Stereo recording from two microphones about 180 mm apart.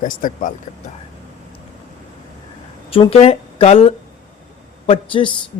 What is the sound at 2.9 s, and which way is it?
A man's voice, 30° left (ahead or behind).